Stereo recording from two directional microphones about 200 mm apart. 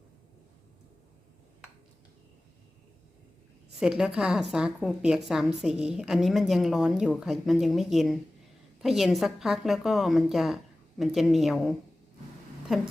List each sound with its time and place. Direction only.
3.8 s a woman's voice: 5° right (ahead or behind)